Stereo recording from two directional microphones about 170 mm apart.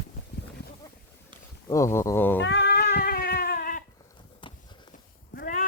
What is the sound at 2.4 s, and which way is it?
Cat, 85° left.